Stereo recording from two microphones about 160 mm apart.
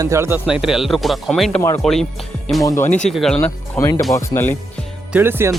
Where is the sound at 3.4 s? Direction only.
15° left (ahead or behind).